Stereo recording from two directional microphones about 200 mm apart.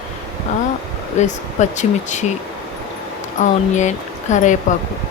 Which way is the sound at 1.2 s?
35° left (ahead or behind).